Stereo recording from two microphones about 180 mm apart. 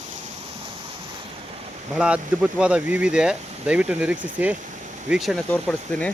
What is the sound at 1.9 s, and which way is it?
Speech, 5° right (ahead or behind).